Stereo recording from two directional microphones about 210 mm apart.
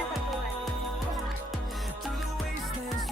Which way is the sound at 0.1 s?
Centre (ahead or behind).